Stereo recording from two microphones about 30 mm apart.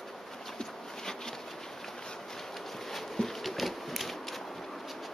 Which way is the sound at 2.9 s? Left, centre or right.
Centre.